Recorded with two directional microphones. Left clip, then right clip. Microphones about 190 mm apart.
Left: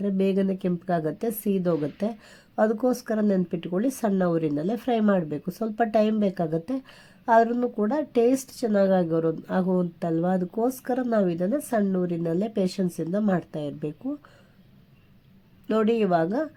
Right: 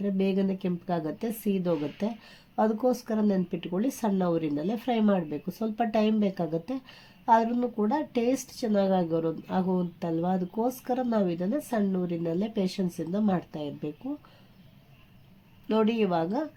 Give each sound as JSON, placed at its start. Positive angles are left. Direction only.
{"t": 0.0, "sound": "a woman's voice", "side_deg": 20}
{"t": 15.7, "sound": "a woman's voice", "side_deg": 20}